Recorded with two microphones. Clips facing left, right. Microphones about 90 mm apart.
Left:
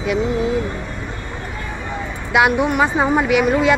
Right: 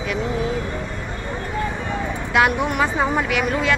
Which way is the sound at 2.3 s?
10° left (ahead or behind).